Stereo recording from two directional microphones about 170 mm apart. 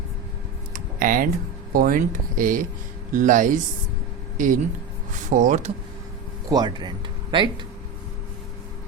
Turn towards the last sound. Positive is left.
turn(degrees=-25)  # may be behind; listen again after turning